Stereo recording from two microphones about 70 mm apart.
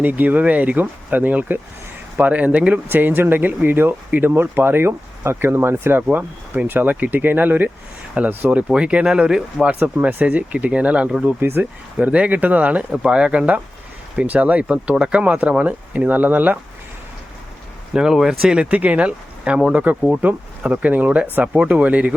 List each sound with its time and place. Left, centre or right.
0.0 s speech: right
9.7 s speech: right
11.3 s speech: right
17.9 s speech: centre